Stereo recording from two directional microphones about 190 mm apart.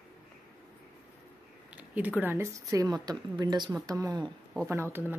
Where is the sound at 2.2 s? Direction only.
10° right (ahead or behind).